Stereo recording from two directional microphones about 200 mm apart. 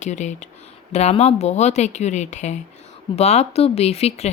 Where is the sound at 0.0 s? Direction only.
35° left (ahead or behind).